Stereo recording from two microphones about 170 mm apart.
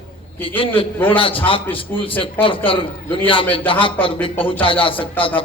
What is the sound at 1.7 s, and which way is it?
A man's voice, 30° left (ahead or behind).